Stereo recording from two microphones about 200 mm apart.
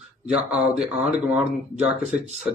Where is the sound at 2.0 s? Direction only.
35° right (ahead or behind).